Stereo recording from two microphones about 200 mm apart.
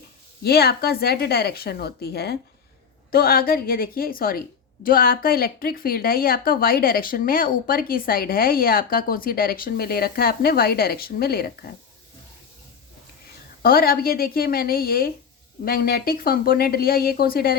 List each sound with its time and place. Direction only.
0.4 s a woman's voice: 50° left (ahead or behind)
13.6 s a woman's voice: 50° left (ahead or behind)